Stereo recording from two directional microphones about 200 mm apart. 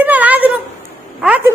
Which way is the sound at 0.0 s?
10° right (ahead or behind).